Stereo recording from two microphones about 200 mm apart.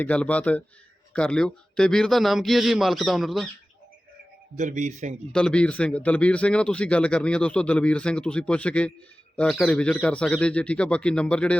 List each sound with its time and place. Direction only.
0.0 s a man's voice: 5° left (ahead or behind)
4.5 s speech: 35° right (ahead or behind)
5.3 s speech: 5° left (ahead or behind)